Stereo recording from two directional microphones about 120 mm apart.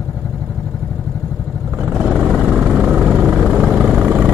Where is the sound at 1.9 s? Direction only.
Centre (ahead or behind).